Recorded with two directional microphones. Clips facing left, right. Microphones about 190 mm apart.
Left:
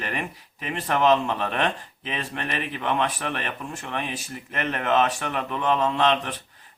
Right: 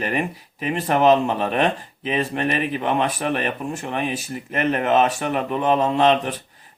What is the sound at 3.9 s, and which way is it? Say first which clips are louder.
Speech: right 4 dB; 10° right (ahead or behind).